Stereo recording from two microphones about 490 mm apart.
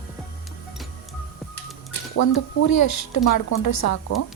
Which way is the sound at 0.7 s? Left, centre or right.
Centre.